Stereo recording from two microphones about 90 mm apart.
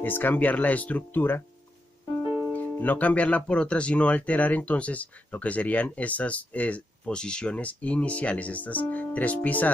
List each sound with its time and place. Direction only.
0.0 s speech: 20° left (ahead or behind)
2.5 s speech: 20° left (ahead or behind)